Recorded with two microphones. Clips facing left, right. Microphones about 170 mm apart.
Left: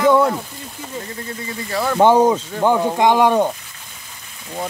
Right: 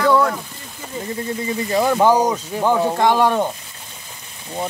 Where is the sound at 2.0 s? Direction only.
25° left (ahead or behind).